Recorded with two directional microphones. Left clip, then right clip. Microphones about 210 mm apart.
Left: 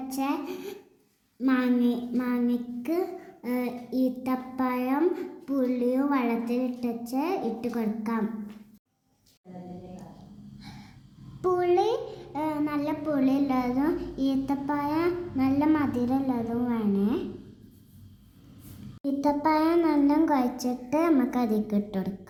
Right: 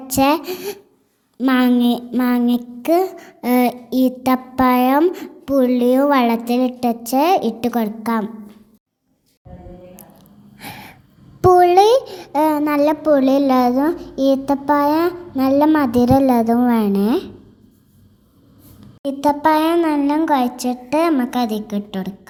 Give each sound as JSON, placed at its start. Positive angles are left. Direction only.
{"t": 0.1, "sound": "a woman's voice", "side_deg": -45}
{"t": 10.6, "sound": "gasp", "side_deg": -35}
{"t": 11.3, "sound": "a child's voice", "side_deg": -35}
{"t": 19.0, "sound": "speech", "side_deg": -25}